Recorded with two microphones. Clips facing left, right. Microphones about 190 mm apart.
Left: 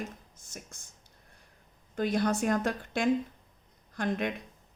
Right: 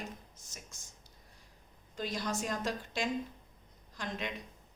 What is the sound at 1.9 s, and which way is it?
A woman's voice, 55° left (ahead or behind).